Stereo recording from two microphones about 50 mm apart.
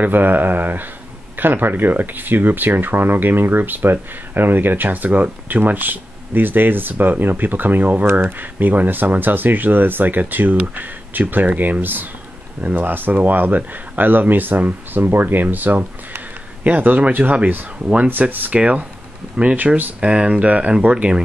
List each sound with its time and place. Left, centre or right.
0.0 s speech: right
8.1 s speech: right